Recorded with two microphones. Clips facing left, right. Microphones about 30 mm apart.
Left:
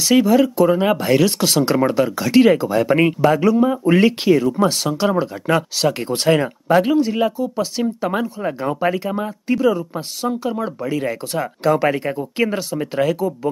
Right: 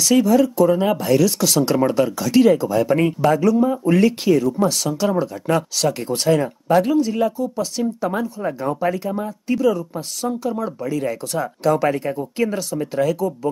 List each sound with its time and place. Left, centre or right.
0.0 s speech: left
1.7 s speech: centre
2.1 s speech: left